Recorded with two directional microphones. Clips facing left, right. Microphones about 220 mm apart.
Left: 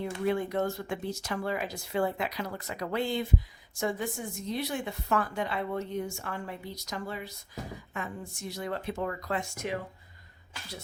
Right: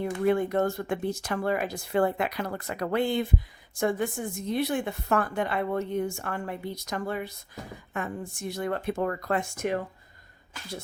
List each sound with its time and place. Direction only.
0.0 s a woman's voice: 55° right (ahead or behind)